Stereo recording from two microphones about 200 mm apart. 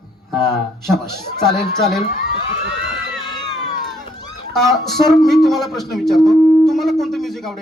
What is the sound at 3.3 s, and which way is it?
Crowd, 20° left (ahead or behind).